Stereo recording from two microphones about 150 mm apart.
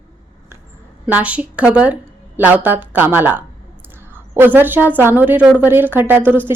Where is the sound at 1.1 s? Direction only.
10° right (ahead or behind).